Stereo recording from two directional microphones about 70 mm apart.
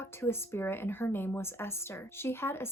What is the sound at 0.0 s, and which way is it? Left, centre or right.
A woman's voice, left.